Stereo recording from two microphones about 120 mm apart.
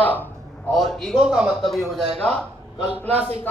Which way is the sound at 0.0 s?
15° left (ahead or behind).